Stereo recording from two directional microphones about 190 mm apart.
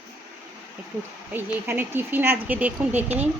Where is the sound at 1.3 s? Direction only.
10° right (ahead or behind).